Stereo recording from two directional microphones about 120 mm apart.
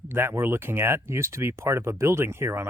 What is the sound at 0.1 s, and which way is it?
Speech, 20° right (ahead or behind).